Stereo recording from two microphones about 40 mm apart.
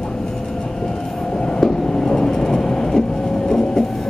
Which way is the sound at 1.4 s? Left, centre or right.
Centre.